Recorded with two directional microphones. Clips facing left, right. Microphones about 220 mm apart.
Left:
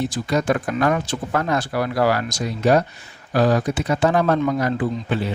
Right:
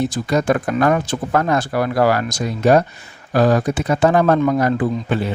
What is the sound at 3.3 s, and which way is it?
Speech, 50° right (ahead or behind).